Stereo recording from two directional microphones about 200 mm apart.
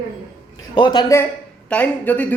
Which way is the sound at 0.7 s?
20° left (ahead or behind).